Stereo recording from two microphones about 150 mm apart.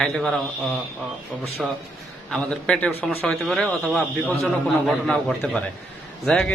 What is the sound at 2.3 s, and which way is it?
A man's voice, 5° left (ahead or behind).